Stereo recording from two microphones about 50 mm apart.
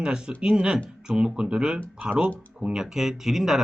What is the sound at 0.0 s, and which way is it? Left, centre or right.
Speech, centre.